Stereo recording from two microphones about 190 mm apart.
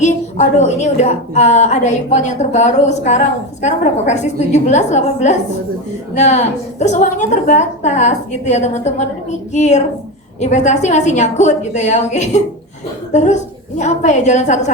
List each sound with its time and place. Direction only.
0.0 s a woman's voice: 40° left (ahead or behind)